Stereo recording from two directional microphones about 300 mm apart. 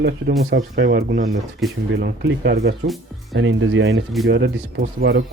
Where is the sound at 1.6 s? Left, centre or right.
Centre.